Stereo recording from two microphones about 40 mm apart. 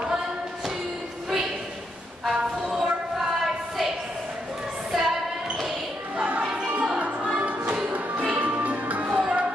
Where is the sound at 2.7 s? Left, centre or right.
Centre.